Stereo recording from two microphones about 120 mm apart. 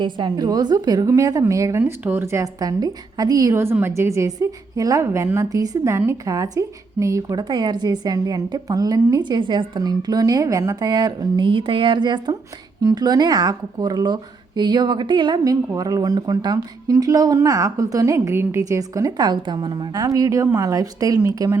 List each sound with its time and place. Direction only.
0.0 s a woman's voice: 40° right (ahead or behind)